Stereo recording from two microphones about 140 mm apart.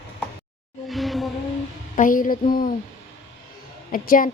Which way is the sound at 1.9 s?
75° left (ahead or behind).